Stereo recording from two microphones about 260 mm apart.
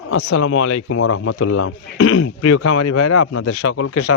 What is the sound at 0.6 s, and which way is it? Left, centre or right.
Speech, left.